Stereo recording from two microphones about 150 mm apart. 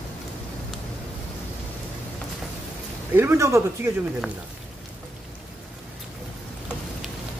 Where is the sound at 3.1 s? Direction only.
15° right (ahead or behind).